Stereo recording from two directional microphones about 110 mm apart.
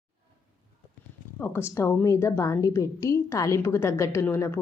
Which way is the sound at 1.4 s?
20° left (ahead or behind).